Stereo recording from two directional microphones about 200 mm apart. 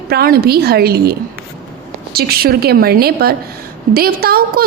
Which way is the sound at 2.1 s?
50° right (ahead or behind).